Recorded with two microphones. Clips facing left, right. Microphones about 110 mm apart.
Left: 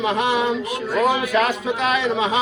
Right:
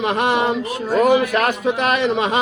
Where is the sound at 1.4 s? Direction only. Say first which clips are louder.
Right 2 dB; 55° right (ahead or behind).